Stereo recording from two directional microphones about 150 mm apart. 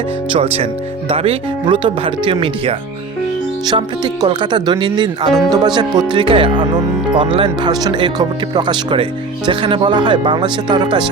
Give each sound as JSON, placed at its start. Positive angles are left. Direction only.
{"t": 0.5, "sound": "speech", "side_deg": -40}